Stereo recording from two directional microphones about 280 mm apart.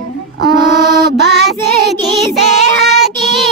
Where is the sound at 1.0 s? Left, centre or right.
Right.